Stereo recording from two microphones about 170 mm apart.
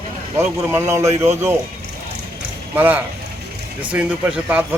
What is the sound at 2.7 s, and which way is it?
Speech, 10° right (ahead or behind).